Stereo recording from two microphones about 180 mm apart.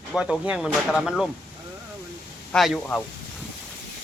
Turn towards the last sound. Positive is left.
turn(degrees=5)  # may be behind; listen again after turning